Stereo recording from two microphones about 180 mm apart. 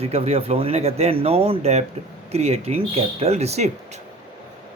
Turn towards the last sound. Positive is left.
turn(degrees=-35)  # may be behind; listen again after turning